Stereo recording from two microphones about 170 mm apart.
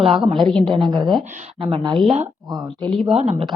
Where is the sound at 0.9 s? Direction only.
25° right (ahead or behind).